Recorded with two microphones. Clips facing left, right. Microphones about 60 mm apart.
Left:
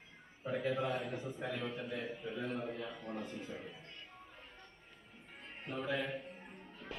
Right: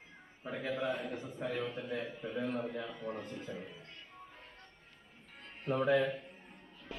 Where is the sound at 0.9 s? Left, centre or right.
Centre.